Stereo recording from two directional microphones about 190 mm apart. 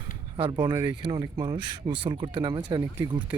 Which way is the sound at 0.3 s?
25° right (ahead or behind).